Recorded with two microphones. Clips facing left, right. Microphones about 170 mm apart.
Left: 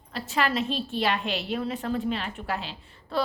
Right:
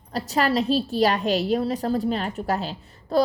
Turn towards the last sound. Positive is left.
turn(degrees=-40)  # may be behind; listen again after turning